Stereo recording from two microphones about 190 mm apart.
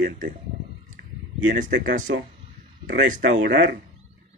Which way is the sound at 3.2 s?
65° right (ahead or behind).